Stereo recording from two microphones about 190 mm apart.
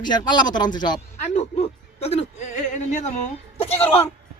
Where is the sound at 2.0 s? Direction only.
35° left (ahead or behind).